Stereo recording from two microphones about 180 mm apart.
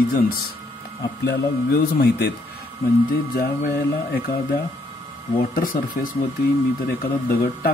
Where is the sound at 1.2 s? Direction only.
60° left (ahead or behind).